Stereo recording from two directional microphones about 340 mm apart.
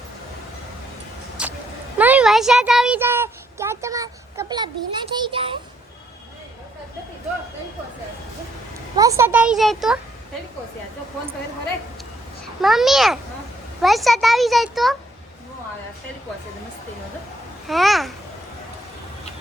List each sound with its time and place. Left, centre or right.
1.4 s a sound: centre
9.0 s a child's voice: centre
12.6 s a child's voice: centre
17.7 s a child's voice: centre